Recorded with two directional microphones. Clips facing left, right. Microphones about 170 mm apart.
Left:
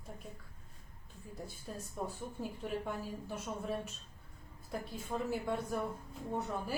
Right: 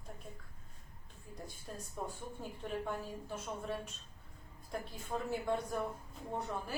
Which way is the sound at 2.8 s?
5° left (ahead or behind).